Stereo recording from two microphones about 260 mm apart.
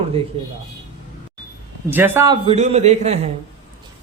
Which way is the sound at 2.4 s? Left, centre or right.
Right.